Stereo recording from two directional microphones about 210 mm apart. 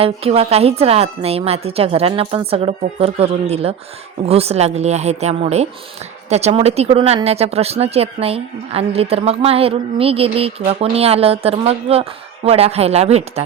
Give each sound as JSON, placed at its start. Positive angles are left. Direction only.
{"t": 0.0, "sound": "speech", "side_deg": -25}